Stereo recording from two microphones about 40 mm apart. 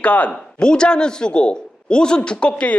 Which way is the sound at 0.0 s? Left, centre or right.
Left.